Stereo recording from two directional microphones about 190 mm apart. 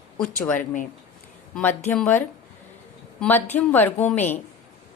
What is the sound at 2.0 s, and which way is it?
A woman's voice, 10° left (ahead or behind).